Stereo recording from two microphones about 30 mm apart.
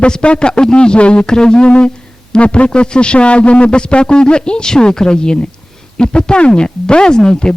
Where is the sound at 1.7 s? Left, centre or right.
Left.